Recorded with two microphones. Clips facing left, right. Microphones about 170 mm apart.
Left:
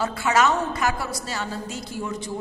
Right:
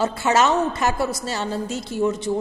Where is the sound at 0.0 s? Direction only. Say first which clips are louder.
Right 2 dB; 25° right (ahead or behind).